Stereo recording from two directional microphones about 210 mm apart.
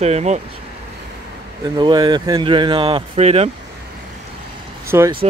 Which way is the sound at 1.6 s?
20° right (ahead or behind).